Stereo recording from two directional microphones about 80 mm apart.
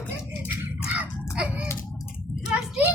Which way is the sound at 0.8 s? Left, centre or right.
Centre.